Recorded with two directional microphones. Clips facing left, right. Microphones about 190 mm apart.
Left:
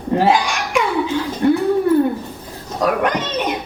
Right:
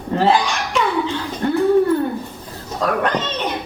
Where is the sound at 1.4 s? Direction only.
15° left (ahead or behind).